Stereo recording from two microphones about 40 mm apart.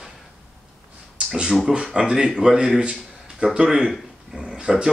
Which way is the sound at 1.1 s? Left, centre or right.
Right.